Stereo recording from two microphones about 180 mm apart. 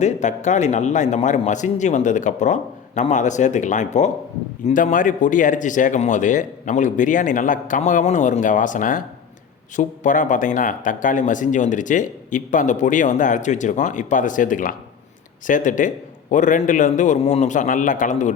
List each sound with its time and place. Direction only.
0.0 s a man's voice: 40° left (ahead or behind)